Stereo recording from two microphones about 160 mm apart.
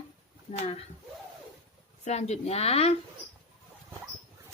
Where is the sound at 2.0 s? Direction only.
45° left (ahead or behind).